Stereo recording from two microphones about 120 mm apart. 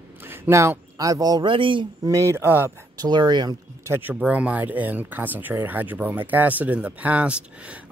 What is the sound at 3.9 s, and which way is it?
Speech, 15° right (ahead or behind).